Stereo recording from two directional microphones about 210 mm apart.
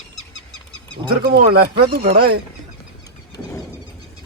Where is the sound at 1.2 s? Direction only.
45° right (ahead or behind).